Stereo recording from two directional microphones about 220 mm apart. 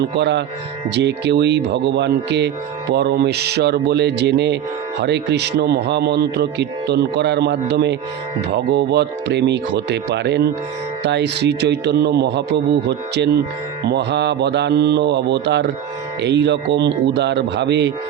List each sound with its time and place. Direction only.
0.0 s speech: 50° right (ahead or behind)